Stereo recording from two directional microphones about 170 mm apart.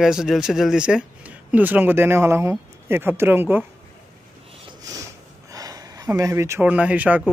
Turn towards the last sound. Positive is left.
turn(degrees=-10)  # may be behind; listen again after turning